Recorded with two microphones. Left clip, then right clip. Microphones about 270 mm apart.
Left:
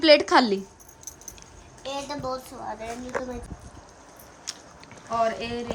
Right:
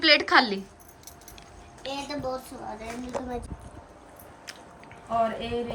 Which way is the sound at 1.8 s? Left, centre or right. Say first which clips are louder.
Left 1 dB; centre.